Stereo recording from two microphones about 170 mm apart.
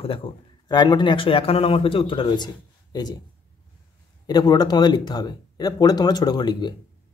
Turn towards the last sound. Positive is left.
turn(degrees=25)  # may be behind; listen again after turning